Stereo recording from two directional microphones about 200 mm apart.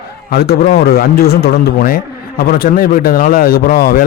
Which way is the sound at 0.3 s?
50° left (ahead or behind).